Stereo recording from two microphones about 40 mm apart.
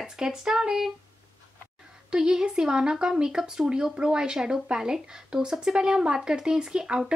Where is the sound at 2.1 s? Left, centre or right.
Centre.